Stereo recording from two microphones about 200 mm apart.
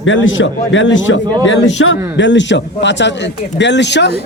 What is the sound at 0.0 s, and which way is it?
A man's voice, 70° left (ahead or behind).